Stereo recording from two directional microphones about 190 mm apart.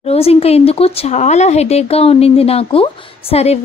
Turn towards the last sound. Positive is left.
turn(degrees=30)  # may be behind; listen again after turning